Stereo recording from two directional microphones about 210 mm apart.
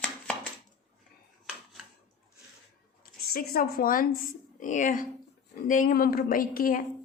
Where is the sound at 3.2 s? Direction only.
45° left (ahead or behind).